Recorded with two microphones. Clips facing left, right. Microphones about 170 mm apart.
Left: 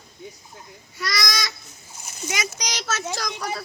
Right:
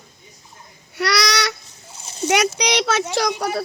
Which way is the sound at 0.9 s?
70° right (ahead or behind).